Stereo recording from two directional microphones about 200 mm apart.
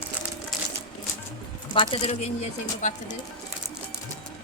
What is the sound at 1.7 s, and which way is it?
Speech, 30° left (ahead or behind).